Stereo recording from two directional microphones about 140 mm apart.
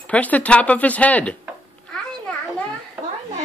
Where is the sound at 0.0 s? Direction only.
10° left (ahead or behind).